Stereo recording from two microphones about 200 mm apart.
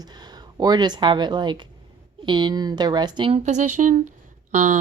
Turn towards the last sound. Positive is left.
turn(degrees=-40)  # may be behind; listen again after turning